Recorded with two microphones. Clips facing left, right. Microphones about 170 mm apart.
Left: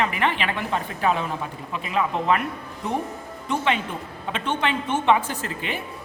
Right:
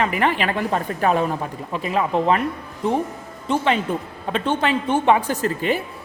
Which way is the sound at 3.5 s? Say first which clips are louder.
Right 4 dB; 35° right (ahead or behind).